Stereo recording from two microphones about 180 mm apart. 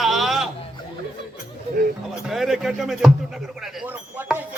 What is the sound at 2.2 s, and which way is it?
Speech, centre (ahead or behind).